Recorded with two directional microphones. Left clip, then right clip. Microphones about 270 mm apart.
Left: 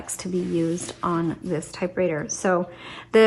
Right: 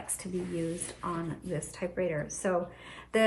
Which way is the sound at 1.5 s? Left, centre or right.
Centre.